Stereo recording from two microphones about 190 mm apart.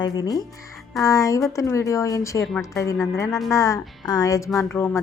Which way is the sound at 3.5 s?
15° left (ahead or behind).